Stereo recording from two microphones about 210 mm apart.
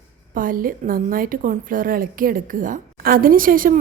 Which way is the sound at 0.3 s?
40° right (ahead or behind).